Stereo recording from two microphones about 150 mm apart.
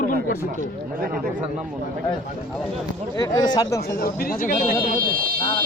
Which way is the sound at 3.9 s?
80° left.